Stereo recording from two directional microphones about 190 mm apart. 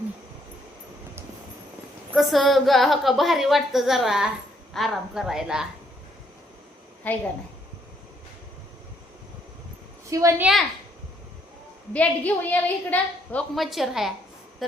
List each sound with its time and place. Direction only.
2.1 s a woman's voice: centre (ahead or behind)
7.1 s a woman's voice: 10° left (ahead or behind)
10.1 s a woman's voice: 15° right (ahead or behind)
11.9 s a woman's voice: 10° left (ahead or behind)
14.6 s a sound: centre (ahead or behind)